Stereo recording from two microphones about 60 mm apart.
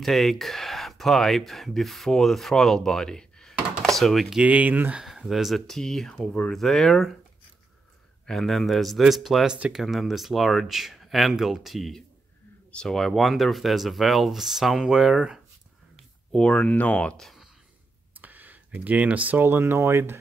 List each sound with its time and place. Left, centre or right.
0.0 s speech: centre
4.4 s speech: right
5.0 s speech: centre
8.3 s speech: centre
9.5 s speech: centre
9.8 s speech: centre
16.3 s speech: centre
18.2 s computer keyboard: right
19.4 s speech: right